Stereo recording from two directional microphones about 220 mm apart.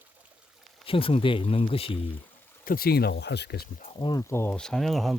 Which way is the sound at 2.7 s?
45° left (ahead or behind).